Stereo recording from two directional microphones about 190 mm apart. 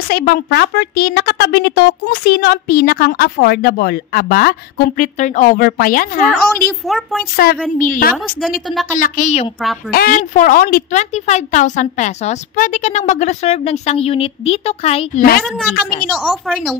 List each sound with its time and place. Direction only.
0.1 s a woman's voice: 50° left (ahead or behind)
6.9 s a woman's voice: centre (ahead or behind)
7.8 s a woman's voice: 45° left (ahead or behind)
8.4 s a woman's voice: centre (ahead or behind)
8.9 s a woman's voice: 45° left (ahead or behind)
9.8 s a woman's voice: 50° left (ahead or behind); by 15.2 s 30° left (ahead or behind)
15.7 s a woman's voice: 50° left (ahead or behind)
16.1 s a woman's voice: 5° right (ahead or behind)